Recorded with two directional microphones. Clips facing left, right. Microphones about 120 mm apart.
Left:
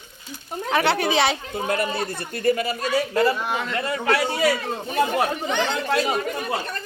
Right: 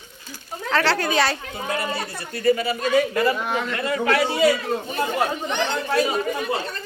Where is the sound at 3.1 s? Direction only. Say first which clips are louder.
Left 1 dB; 35° left (ahead or behind).